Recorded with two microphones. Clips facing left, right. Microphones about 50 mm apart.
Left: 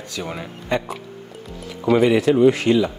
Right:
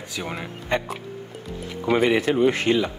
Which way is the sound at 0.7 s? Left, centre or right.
Right.